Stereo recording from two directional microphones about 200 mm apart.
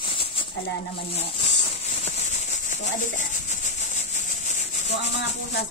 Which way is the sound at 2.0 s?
35° left (ahead or behind).